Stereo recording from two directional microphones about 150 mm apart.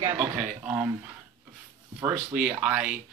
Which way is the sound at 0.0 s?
20° right (ahead or behind).